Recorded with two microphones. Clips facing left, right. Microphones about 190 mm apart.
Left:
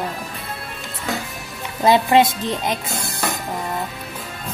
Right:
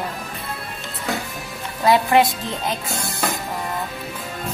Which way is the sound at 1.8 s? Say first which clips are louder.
Left 1 dB; 20° left (ahead or behind).